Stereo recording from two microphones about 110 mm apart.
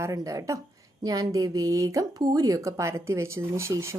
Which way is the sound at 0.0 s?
30° right (ahead or behind).